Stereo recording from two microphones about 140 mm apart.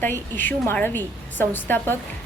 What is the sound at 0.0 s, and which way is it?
A woman's voice, 15° left (ahead or behind).